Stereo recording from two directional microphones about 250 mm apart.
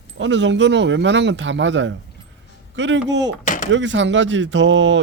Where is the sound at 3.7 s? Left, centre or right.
Right.